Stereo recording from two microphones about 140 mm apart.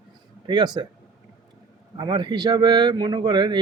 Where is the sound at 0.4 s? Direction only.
30° right (ahead or behind).